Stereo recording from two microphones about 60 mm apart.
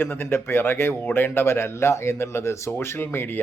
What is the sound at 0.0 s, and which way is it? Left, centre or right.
Speech, left.